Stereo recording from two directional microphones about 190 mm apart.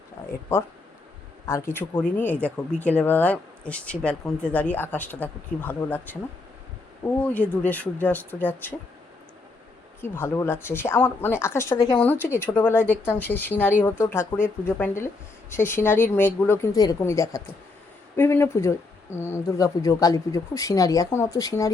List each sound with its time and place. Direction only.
1.5 s speech: 15° left (ahead or behind)
10.0 s speech: 10° left (ahead or behind)